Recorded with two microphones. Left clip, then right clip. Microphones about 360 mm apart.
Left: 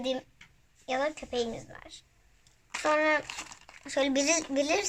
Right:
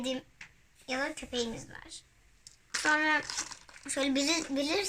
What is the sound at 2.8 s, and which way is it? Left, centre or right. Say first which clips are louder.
A woman's voice: left 2 dB; centre.